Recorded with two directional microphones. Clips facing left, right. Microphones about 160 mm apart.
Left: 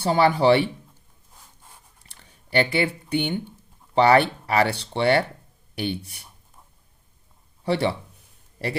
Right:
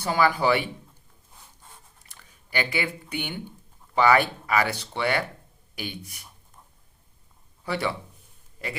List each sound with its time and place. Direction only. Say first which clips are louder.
0.0 s speech: left 4 dB; 30° left (ahead or behind)
2.0 s speech: left 9 dB; 30° left (ahead or behind)
7.6 s a man's voice: left 5 dB; 30° left (ahead or behind)